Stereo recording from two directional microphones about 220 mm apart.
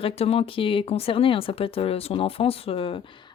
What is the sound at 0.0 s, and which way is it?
A woman's voice, 25° left (ahead or behind).